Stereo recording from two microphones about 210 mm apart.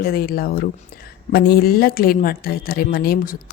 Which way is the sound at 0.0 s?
45° left (ahead or behind).